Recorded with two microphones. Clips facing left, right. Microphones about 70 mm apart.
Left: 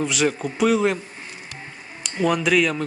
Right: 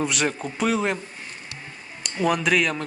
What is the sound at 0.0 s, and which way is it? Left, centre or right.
Speech, centre.